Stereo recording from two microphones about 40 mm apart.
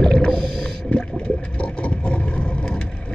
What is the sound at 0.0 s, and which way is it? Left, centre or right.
Whale vocalization, left.